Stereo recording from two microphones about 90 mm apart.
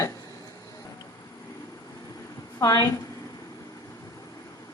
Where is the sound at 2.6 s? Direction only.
40° left (ahead or behind).